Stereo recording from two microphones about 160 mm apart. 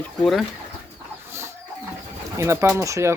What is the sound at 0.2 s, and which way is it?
Speech, centre (ahead or behind).